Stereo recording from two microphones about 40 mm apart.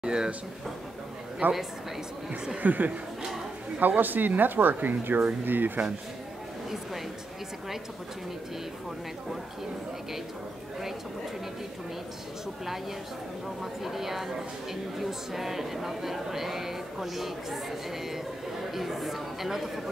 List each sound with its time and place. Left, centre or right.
0.0 s speech: centre
1.4 s a woman's voice: right
2.5 s speech: right
13.6 s a woman's voice: centre